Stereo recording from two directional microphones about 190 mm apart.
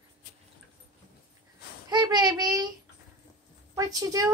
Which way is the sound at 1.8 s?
20° right (ahead or behind).